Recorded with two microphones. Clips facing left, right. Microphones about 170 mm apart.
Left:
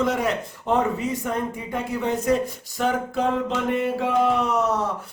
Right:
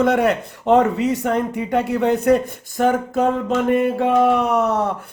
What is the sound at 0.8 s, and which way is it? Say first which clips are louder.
Speech: right 6 dB; 75° right (ahead or behind).